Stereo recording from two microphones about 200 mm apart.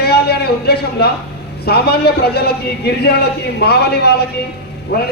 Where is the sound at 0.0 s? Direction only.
55° left (ahead or behind).